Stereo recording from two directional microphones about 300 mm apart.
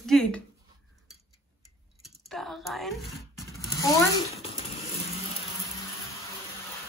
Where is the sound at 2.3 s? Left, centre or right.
Centre.